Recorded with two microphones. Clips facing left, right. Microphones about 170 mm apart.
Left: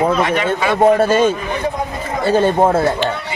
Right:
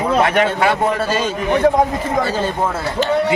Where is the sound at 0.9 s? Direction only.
55° left (ahead or behind).